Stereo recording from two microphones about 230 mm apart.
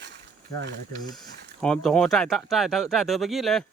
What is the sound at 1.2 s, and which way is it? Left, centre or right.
Speech, centre.